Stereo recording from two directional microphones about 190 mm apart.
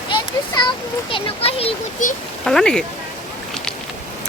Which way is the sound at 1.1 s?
30° left (ahead or behind).